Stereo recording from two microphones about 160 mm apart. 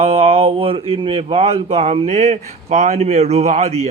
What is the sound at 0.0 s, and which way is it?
Speech, 40° right (ahead or behind).